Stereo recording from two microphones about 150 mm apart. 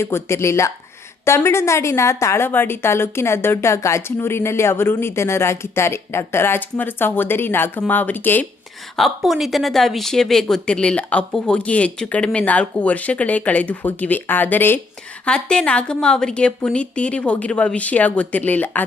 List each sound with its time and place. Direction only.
0.0 s a woman's voice: 15° left (ahead or behind)
9.0 s a woman's voice: centre (ahead or behind)